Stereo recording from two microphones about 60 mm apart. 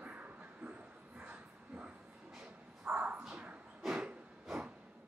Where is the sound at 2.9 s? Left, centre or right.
Centre.